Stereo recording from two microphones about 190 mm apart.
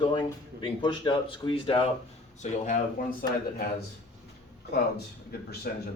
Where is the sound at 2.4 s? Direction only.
45° left (ahead or behind).